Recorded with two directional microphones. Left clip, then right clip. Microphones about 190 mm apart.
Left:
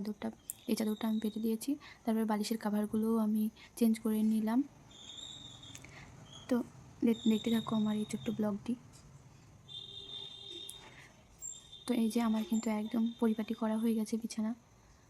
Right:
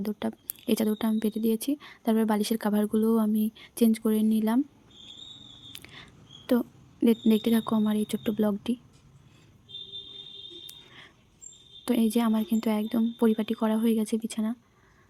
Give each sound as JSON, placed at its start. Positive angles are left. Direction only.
{"t": 0.0, "sound": "a woman's voice", "side_deg": -30}
{"t": 5.7, "sound": "dog", "side_deg": -30}
{"t": 6.5, "sound": "a woman's voice", "side_deg": -30}
{"t": 11.9, "sound": "a woman's voice", "side_deg": -30}